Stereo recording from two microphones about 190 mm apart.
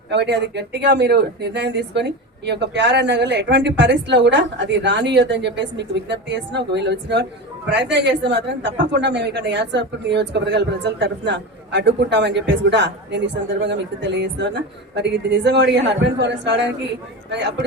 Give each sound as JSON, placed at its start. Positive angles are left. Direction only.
{"t": 0.1, "sound": "speech", "side_deg": -65}